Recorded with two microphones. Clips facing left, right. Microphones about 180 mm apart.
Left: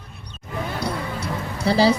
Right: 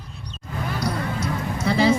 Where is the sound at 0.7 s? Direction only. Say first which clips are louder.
Right 3 dB; 30° left (ahead or behind).